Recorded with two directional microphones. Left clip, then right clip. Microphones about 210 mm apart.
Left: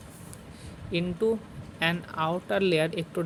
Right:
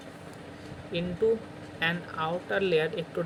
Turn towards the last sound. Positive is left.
turn(degrees=40)  # may be behind; listen again after turning